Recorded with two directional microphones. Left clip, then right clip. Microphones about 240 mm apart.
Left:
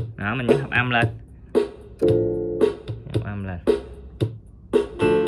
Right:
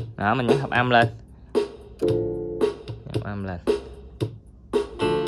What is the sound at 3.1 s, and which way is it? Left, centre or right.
Music, centre.